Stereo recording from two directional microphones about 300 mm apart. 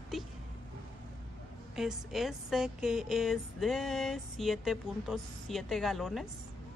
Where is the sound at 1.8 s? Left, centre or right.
Centre.